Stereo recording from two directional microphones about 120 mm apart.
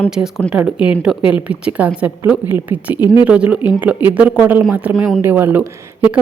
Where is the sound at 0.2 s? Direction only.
10° right (ahead or behind).